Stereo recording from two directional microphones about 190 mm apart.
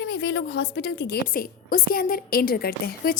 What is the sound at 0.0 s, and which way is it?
A woman's voice, 60° left (ahead or behind).